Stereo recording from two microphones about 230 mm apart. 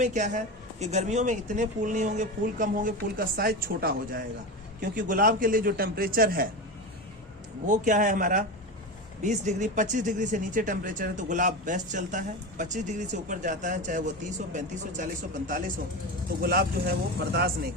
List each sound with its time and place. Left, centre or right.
0.0 s speech: right
7.7 s speech: right